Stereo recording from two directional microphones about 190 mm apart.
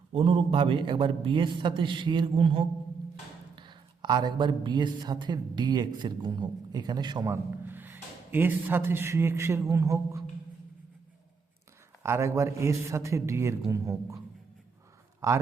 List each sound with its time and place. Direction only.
0.1 s a man's voice: 30° right (ahead or behind)
12.0 s a man's voice: 15° right (ahead or behind)
15.2 s a man's voice: 15° right (ahead or behind)